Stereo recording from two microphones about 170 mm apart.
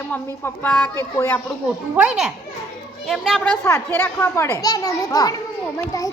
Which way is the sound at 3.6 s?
15° left (ahead or behind).